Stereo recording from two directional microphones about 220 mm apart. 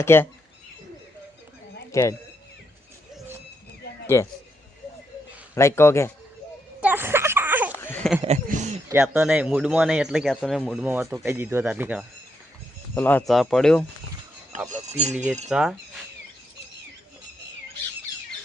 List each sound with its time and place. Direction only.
0.0 s a man's voice: 10° left (ahead or behind)
1.9 s speech: 15° left (ahead or behind)
4.0 s speech: 10° left (ahead or behind)
5.5 s a man's voice: 10° left (ahead or behind)
6.8 s a sound: 10° right (ahead or behind)
7.8 s a sound: 10° left (ahead or behind)
8.4 s speech: 35° right (ahead or behind)
8.9 s a man's voice: 5° right (ahead or behind)
12.9 s a man's voice: 10° left (ahead or behind)
14.7 s speech: 30° right (ahead or behind)
15.4 s a man's voice: 5° right (ahead or behind)